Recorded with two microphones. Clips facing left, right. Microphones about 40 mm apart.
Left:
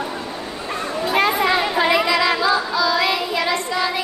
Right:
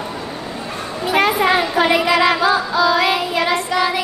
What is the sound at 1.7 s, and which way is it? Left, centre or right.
Child singing, centre.